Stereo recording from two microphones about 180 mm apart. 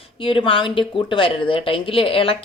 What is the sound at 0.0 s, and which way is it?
Speech, 30° left (ahead or behind).